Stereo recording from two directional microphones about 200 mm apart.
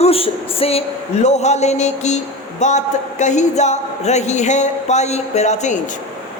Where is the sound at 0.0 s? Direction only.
30° left (ahead or behind).